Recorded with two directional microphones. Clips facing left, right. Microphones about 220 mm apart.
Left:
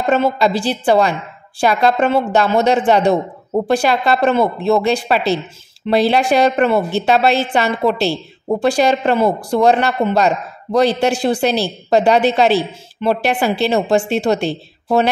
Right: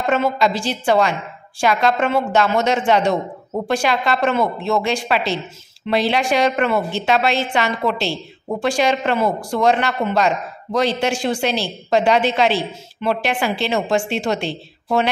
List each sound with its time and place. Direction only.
0.0 s speech: 35° left (ahead or behind)